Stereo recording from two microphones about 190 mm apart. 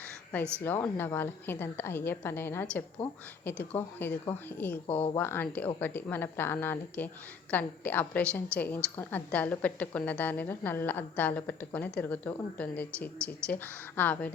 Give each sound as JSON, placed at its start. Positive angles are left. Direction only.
{"t": 0.6, "sound": "a woman's voice", "side_deg": 10}
{"t": 4.9, "sound": "speech", "side_deg": 30}
{"t": 5.1, "sound": "a woman's voice", "side_deg": 10}